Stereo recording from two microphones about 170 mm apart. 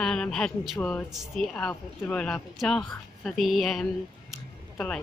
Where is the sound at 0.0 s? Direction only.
5° left (ahead or behind).